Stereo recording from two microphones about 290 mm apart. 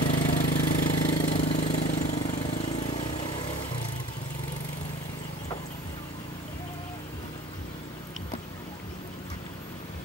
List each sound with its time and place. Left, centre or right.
0.0 s engine: left